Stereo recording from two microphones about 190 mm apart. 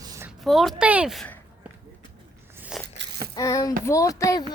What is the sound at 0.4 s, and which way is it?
Speech, centre (ahead or behind).